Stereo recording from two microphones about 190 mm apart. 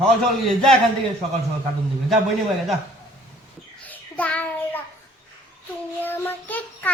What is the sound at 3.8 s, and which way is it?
Child singing, 10° left (ahead or behind).